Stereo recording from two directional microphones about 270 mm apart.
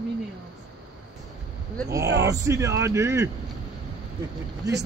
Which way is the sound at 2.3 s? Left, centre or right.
Centre.